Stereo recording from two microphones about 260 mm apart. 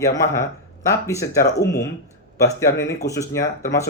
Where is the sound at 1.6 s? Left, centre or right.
Left.